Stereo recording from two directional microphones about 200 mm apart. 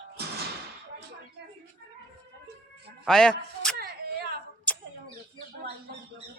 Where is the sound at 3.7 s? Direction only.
50° right (ahead or behind).